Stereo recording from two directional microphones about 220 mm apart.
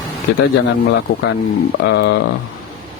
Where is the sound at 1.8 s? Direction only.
50° left (ahead or behind).